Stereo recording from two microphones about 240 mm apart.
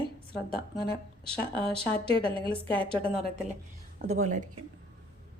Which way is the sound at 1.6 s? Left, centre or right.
Right.